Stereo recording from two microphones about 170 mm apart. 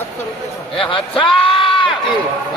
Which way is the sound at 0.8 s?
30° left (ahead or behind).